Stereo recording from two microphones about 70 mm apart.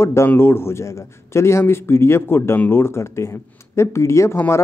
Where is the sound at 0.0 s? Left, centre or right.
Left.